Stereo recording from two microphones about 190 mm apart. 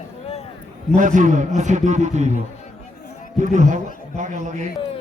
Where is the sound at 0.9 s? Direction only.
45° right (ahead or behind).